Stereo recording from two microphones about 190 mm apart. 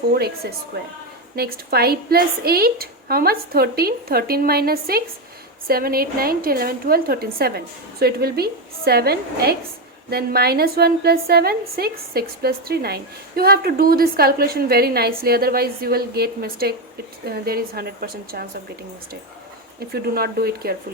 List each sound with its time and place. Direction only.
1.4 s a woman's voice: 55° right (ahead or behind)
19.9 s a woman's voice: 55° right (ahead or behind)